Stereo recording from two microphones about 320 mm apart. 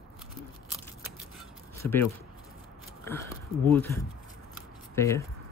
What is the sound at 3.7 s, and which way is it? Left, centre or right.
Speech, centre.